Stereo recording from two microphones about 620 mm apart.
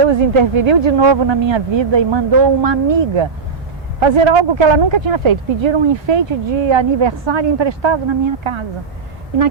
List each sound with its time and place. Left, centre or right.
0.1 s speech: right